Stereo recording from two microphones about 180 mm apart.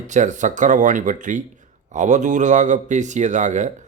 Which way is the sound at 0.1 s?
45° right (ahead or behind).